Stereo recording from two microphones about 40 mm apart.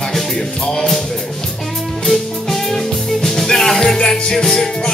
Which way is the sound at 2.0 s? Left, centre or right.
Centre.